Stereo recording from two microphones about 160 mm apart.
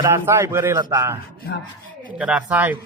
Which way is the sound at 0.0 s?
15° right (ahead or behind).